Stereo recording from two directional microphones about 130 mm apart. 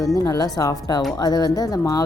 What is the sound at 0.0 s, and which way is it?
Speech, 25° left (ahead or behind).